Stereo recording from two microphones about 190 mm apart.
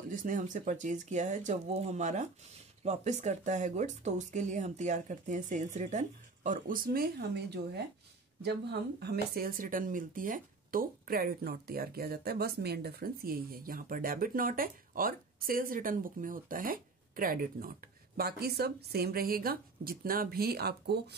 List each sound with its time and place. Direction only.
0.1 s speech: 45° right (ahead or behind); by 7.8 s 60° right (ahead or behind)
9.0 s speech: 55° right (ahead or behind)